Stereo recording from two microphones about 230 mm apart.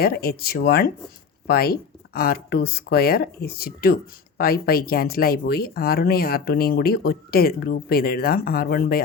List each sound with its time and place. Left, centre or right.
0.0 s speech: left